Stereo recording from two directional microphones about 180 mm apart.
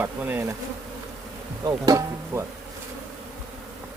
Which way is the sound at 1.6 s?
20° right (ahead or behind).